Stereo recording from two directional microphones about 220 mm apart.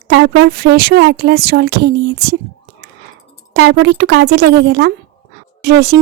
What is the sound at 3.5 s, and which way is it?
Speech, 55° right (ahead or behind).